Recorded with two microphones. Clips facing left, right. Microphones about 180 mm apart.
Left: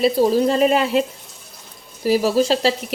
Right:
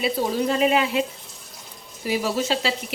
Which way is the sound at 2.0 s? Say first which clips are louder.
Left 7 dB; 40° left (ahead or behind).